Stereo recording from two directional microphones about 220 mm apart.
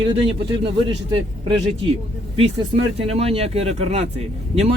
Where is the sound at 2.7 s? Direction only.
30° right (ahead or behind).